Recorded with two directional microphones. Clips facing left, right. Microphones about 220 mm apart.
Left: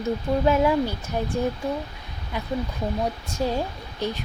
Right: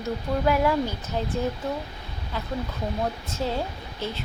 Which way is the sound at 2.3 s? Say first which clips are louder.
Left 3 dB; 15° left (ahead or behind).